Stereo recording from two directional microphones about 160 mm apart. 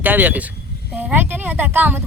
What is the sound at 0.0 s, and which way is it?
Speech, 10° right (ahead or behind).